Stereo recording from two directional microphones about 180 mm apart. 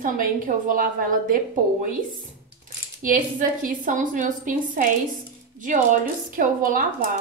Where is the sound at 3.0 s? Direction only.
50° right (ahead or behind).